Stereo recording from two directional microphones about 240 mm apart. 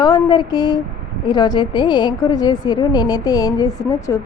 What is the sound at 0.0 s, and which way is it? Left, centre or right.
A woman's voice, centre.